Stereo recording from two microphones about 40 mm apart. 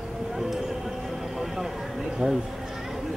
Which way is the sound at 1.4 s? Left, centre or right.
Centre.